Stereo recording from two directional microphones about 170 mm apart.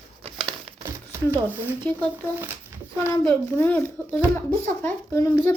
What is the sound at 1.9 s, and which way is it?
Speech, 10° left (ahead or behind).